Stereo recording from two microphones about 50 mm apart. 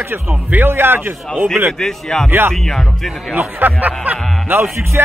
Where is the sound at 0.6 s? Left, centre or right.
Right.